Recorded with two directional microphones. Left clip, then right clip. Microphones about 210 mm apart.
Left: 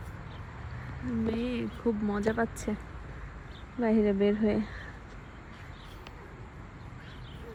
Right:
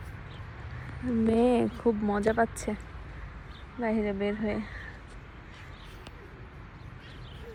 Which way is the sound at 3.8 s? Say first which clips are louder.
Left 3 dB; 20° left (ahead or behind).